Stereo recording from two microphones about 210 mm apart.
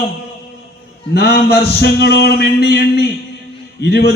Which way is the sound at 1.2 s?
50° left (ahead or behind).